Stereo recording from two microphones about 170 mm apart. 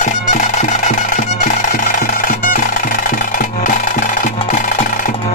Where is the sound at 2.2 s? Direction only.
55° left (ahead or behind).